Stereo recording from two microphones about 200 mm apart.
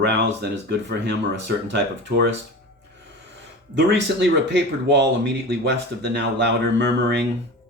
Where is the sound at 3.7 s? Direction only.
60° right (ahead or behind).